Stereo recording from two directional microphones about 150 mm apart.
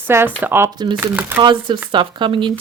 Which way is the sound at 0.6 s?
30° right (ahead or behind).